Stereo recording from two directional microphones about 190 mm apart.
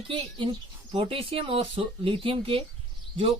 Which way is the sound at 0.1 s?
25° right (ahead or behind).